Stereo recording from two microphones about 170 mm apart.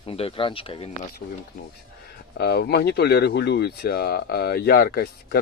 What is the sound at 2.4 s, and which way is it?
Speech, 70° left (ahead or behind).